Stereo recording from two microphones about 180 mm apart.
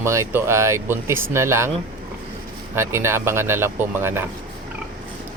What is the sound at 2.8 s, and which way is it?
Speech, 15° right (ahead or behind).